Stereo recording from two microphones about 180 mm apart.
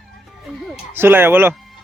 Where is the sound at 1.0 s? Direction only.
10° right (ahead or behind).